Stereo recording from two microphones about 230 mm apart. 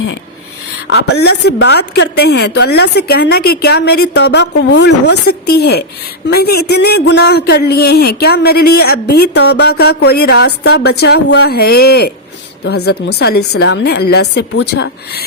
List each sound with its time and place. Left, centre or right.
0.9 s a woman's voice: left